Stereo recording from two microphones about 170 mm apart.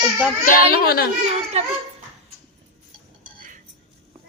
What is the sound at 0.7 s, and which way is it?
Speech, 65° left (ahead or behind).